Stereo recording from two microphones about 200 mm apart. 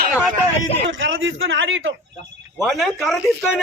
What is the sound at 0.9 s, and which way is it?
A man's voice, 70° right (ahead or behind).